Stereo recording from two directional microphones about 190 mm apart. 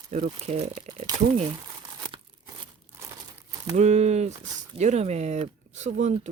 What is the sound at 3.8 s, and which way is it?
Speech, 35° right (ahead or behind).